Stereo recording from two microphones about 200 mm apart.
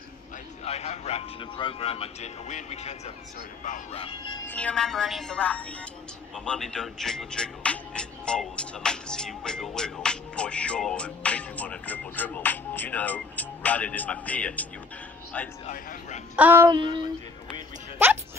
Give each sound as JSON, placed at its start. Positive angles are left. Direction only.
{"t": 0.7, "sound": "a man's voice", "side_deg": 30}
{"t": 4.0, "sound": "speech", "side_deg": 25}
{"t": 4.5, "sound": "speech", "side_deg": 5}
{"t": 15.6, "sound": "a man's voice", "side_deg": 40}
{"t": 16.3, "sound": "speech", "side_deg": -10}
{"t": 16.7, "sound": "a sound", "side_deg": -25}